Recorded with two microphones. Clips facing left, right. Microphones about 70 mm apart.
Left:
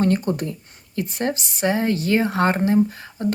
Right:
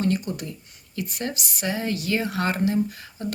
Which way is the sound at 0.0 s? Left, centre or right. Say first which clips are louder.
Left 5 dB; left.